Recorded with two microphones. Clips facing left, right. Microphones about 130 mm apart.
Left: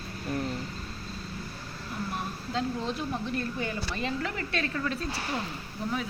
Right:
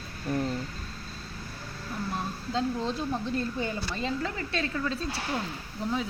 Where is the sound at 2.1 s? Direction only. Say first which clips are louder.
Right 2 dB; 30° right (ahead or behind).